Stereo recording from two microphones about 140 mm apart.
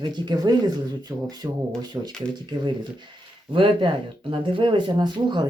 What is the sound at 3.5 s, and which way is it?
Speech, 35° right (ahead or behind).